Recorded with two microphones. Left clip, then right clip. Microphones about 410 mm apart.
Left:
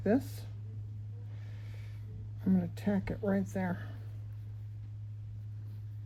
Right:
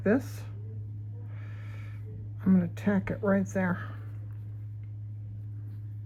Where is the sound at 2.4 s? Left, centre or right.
Right.